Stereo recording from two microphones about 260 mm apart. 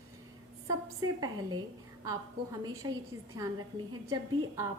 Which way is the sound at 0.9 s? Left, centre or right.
Centre.